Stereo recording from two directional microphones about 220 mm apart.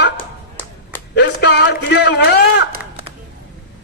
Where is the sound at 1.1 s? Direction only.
50° left (ahead or behind).